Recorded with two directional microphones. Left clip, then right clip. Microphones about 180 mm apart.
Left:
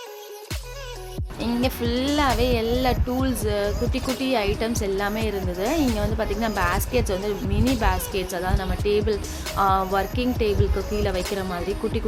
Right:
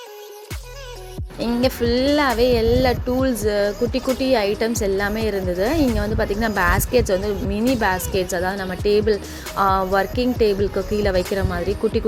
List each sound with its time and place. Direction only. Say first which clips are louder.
1.4 s speech: right 5 dB; 20° right (ahead or behind)